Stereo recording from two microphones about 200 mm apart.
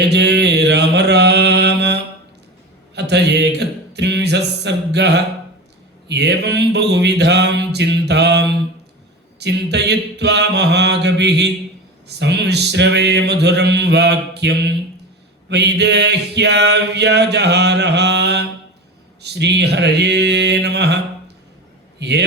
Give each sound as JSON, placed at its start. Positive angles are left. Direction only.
{"t": 0.1, "sound": "mantra", "side_deg": -55}
{"t": 6.1, "sound": "a sound", "side_deg": -60}
{"t": 19.2, "sound": "mantra", "side_deg": -55}
{"t": 21.9, "sound": "a man's voice", "side_deg": -55}